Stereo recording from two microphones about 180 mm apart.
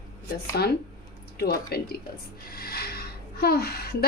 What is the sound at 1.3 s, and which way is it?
Speech, 60° left (ahead or behind).